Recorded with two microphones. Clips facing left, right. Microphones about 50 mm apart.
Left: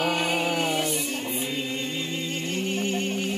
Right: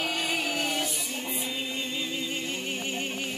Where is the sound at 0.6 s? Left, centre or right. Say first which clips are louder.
Left 4 dB; centre.